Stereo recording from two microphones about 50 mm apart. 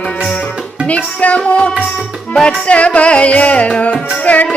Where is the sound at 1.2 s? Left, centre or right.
Left.